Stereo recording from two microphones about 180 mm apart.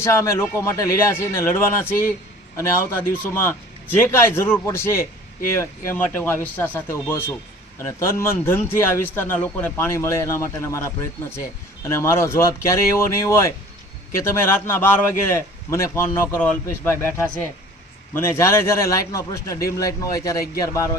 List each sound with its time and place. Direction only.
0.0 s speech: 15° left (ahead or behind)